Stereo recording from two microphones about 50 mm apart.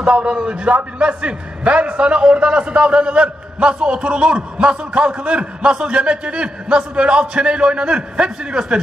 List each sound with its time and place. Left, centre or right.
0.0 s a man's voice: right